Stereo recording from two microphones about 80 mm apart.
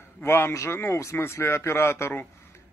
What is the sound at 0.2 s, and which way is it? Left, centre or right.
A man's voice, left.